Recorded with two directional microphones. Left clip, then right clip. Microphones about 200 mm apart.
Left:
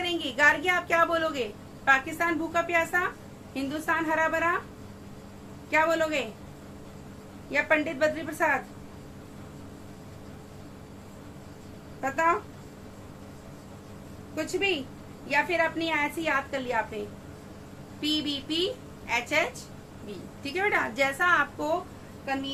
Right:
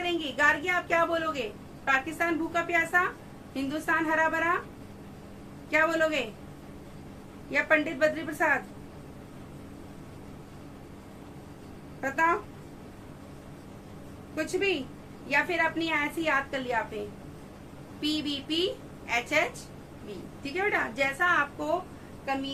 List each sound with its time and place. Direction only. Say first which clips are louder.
0.0 s a woman's voice: left 2 dB; 30° left (ahead or behind); by 4.5 s 10° left (ahead or behind)
5.7 s a woman's voice: left 1 dB; 10° left (ahead or behind)
7.5 s a woman's voice: even; 10° left (ahead or behind)
11.9 s speech: even; 10° left (ahead or behind)
14.3 s a woman's voice: left 1 dB; 10° left (ahead or behind)
18.0 s a woman's voice: left 2 dB; 10° left (ahead or behind)
20.4 s a woman's voice: left 2 dB; 20° left (ahead or behind)